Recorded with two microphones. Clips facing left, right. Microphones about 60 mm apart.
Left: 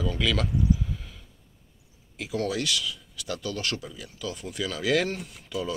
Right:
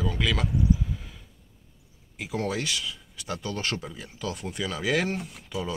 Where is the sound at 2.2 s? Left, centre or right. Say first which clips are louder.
Left 1 dB; centre; by 4.3 s right.